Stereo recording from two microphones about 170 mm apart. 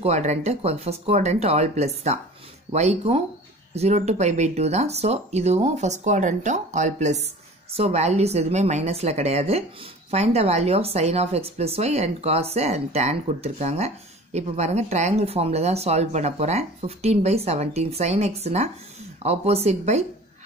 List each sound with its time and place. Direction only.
0.0 s speech: 40° right (ahead or behind)